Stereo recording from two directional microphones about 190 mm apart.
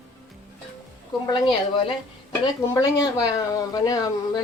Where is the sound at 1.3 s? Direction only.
25° left (ahead or behind).